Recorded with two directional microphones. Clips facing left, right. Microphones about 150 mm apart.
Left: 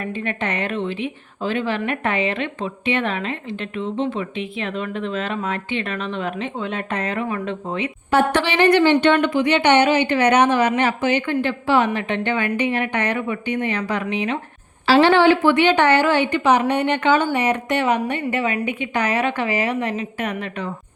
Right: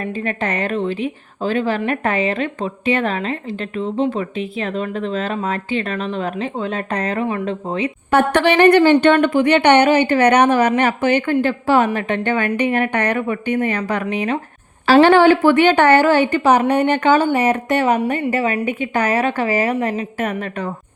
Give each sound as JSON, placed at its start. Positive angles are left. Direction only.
{"t": 0.0, "sound": "a woman's voice", "side_deg": -40}
{"t": 8.1, "sound": "a woman's voice", "side_deg": -55}